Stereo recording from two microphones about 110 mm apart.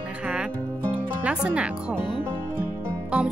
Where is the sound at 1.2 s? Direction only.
10° right (ahead or behind).